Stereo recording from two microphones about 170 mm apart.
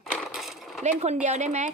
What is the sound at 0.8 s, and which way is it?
Speech, 40° right (ahead or behind).